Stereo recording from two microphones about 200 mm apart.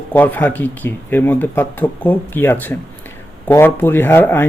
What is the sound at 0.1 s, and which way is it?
Speech, 10° left (ahead or behind).